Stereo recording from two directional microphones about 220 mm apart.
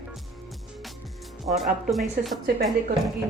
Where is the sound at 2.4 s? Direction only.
45° right (ahead or behind).